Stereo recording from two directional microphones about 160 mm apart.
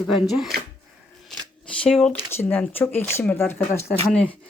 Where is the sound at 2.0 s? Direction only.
15° left (ahead or behind).